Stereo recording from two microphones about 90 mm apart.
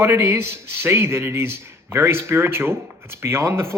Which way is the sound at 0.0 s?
30° right (ahead or behind).